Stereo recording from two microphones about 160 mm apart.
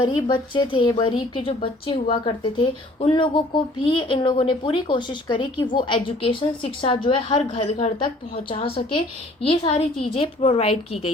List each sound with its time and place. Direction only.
0.0 s a woman's voice: 30° left (ahead or behind)